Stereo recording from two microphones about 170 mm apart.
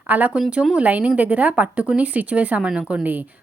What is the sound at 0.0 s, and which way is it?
Speech, 10° right (ahead or behind).